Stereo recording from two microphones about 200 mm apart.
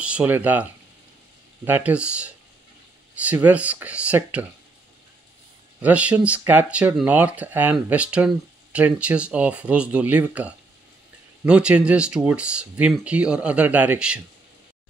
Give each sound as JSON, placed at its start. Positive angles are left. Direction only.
{"t": 0.0, "sound": "speech", "side_deg": -5}
{"t": 5.8, "sound": "speech", "side_deg": -5}